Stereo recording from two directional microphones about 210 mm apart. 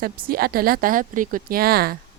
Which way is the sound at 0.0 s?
45° right (ahead or behind).